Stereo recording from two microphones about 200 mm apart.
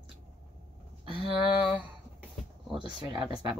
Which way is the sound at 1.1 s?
25° right (ahead or behind).